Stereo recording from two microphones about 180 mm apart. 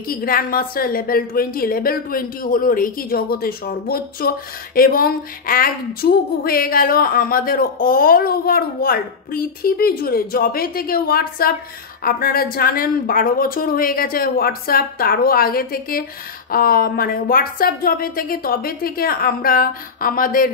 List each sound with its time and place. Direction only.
0.1 s a woman's voice: 55° left (ahead or behind)